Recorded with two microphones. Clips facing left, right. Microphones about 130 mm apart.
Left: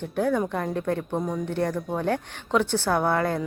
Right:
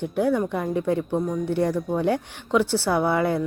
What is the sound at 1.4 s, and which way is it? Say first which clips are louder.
A woman's voice: right 4 dB; 15° right (ahead or behind).